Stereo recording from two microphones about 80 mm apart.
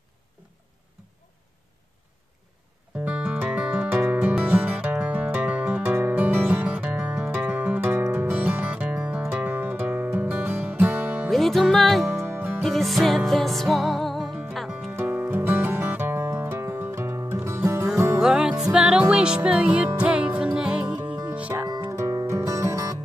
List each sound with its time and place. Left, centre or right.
3.1 s music: centre
11.2 s music: centre
12.3 s music: right
12.6 s music: centre
14.9 s music: right
18.2 s music: centre
21.6 s music: right